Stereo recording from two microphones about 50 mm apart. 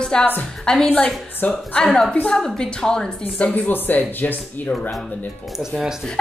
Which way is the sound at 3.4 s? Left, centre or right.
Left.